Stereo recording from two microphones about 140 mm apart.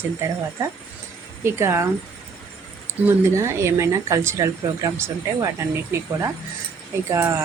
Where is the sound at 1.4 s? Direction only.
20° right (ahead or behind).